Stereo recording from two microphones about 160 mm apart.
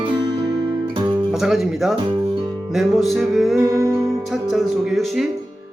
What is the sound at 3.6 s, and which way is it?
Music, 20° right (ahead or behind).